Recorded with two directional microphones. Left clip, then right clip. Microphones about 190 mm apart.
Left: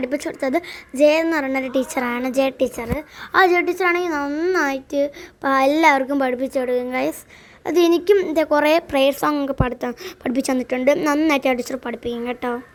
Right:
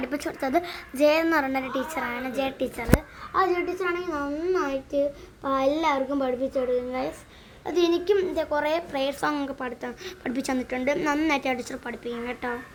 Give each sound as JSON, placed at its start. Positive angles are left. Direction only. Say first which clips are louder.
{"t": 0.0, "sound": "a child's voice", "louder": "left 6 dB", "side_deg": 20}
{"t": 3.3, "sound": "a child's voice", "louder": "left 8 dB", "side_deg": 55}